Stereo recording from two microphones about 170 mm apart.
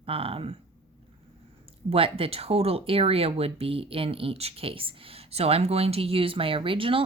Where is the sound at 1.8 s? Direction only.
35° right (ahead or behind).